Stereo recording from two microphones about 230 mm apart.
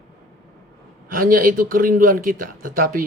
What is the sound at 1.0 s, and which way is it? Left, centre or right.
A man's voice, right.